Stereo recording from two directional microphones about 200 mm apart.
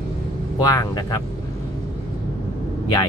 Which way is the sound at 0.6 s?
15° left (ahead or behind).